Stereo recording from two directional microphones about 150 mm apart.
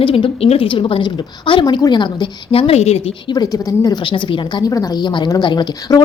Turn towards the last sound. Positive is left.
turn(degrees=30)  # may be behind; listen again after turning